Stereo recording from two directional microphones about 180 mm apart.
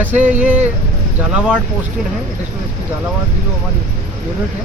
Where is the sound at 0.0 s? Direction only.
10° right (ahead or behind).